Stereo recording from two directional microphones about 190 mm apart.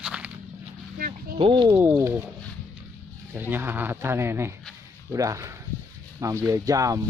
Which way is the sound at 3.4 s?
10° right (ahead or behind).